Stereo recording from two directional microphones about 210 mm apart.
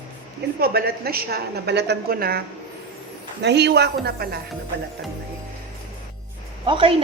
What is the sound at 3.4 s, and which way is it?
Speech, 55° right (ahead or behind).